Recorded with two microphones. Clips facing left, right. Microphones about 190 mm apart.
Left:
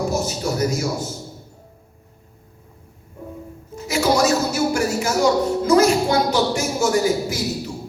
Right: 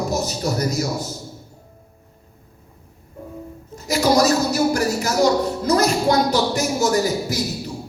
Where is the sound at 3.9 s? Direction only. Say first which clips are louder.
Right 1 dB; 40° right (ahead or behind).